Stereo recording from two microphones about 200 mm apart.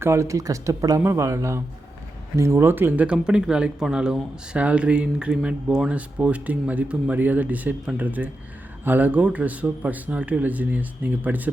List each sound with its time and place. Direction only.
0.0 s speech: 15° right (ahead or behind)